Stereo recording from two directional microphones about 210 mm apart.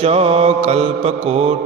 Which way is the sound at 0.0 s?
30° right (ahead or behind).